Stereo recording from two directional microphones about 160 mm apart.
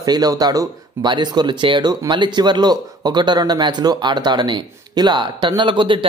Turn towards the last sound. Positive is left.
turn(degrees=-30)  # may be behind; listen again after turning